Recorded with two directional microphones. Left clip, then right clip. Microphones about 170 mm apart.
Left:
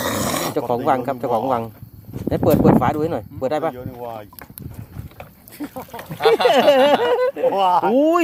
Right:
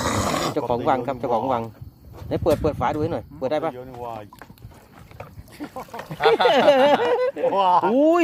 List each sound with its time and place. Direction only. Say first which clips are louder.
0.0 s dog: left 1 dB; 5° left (ahead or behind)
0.9 s speech: left 3 dB; 25° left (ahead or behind)
3.8 s speech: left 2 dB; 65° left (ahead or behind)
5.5 s speech: left 3 dB; 70° left (ahead or behind)
6.0 s speech: left 2 dB; centre (ahead or behind)
6.5 s speech: left 3 dB; 25° left (ahead or behind)
7.5 s speech: right 1 dB; 75° left (ahead or behind)
7.9 s speech: left 2 dB; 20° left (ahead or behind)